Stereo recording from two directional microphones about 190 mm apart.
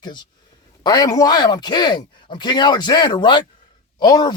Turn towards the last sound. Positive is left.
turn(degrees=20)  # may be behind; listen again after turning